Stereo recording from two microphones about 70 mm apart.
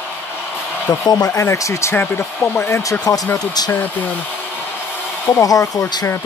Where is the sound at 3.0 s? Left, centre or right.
Left.